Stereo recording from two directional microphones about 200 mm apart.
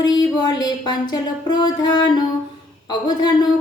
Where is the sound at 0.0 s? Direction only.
20° left (ahead or behind).